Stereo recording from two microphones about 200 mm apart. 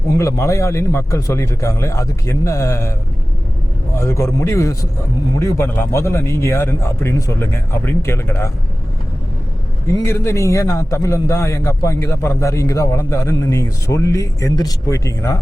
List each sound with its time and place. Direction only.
0.2 s a man's voice: 15° left (ahead or behind)
3.9 s a man's voice: 15° left (ahead or behind)
10.2 s a man's voice: 15° left (ahead or behind)